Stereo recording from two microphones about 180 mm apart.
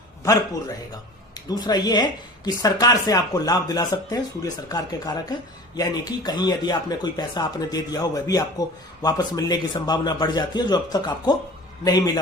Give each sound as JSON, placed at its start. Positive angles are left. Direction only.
{"t": 1.5, "sound": "speech", "side_deg": 20}